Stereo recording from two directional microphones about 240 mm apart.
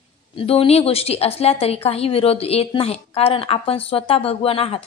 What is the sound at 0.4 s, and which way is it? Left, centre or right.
A woman's voice, left.